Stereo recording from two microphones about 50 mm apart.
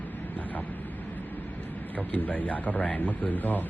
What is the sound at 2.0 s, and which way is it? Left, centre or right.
Speech, left.